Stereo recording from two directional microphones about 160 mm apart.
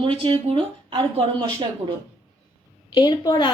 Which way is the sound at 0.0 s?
35° right (ahead or behind).